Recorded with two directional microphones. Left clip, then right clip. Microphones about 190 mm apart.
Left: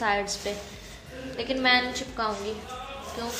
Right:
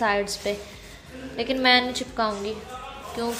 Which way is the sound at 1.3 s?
45° right (ahead or behind).